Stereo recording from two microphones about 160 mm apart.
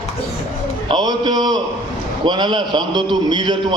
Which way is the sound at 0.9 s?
25° right (ahead or behind).